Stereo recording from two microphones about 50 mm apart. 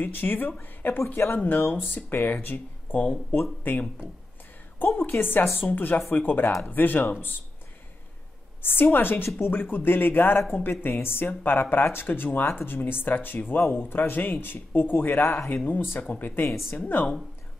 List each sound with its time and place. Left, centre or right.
0.0 s speech: left
4.7 s speech: left
8.6 s speech: left
15.5 s speech: left